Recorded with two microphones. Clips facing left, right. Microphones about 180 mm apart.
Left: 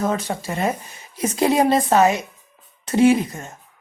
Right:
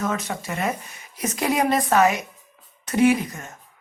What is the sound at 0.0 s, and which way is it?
A woman's voice, 30° left (ahead or behind).